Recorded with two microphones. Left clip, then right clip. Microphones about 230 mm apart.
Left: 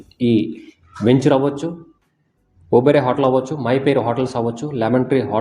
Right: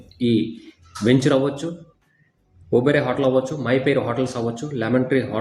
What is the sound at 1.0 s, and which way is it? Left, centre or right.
Speech, centre.